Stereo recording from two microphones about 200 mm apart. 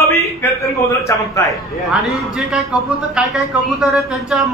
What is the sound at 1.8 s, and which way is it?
A man's voice, centre (ahead or behind).